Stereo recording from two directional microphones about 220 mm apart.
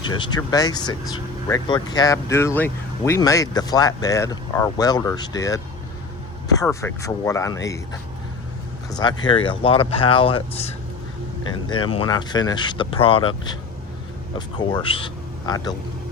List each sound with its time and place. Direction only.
0.0 s speech: 20° left (ahead or behind)
6.6 s speech: 15° left (ahead or behind)
8.9 s speech: 20° left (ahead or behind)